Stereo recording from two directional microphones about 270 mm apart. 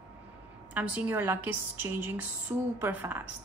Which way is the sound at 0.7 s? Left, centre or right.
Centre.